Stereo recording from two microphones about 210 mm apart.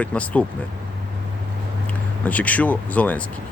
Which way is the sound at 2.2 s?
5° left (ahead or behind).